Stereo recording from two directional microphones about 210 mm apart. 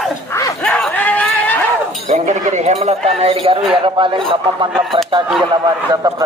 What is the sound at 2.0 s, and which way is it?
Speech, 35° right (ahead or behind).